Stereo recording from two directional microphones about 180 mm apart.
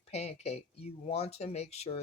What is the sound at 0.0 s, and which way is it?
Speech, 35° left (ahead or behind).